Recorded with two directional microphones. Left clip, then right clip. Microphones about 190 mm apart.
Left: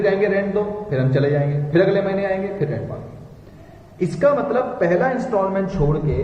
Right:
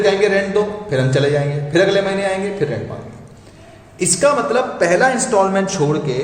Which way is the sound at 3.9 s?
25° right (ahead or behind).